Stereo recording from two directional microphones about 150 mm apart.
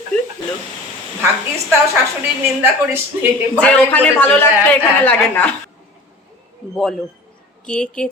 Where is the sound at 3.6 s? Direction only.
10° left (ahead or behind).